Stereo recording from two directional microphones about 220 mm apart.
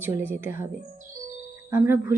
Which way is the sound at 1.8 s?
10° right (ahead or behind).